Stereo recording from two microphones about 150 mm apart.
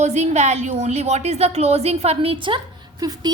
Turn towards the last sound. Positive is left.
turn(degrees=-25)  # may be behind; listen again after turning